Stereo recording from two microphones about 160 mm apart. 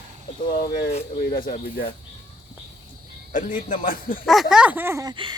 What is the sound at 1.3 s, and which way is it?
Speech, 65° left (ahead or behind).